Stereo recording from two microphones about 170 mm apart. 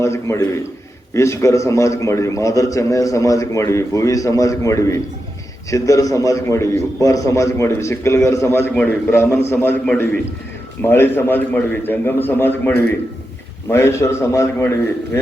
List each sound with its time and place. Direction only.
0.0 s a man's voice: 15° left (ahead or behind)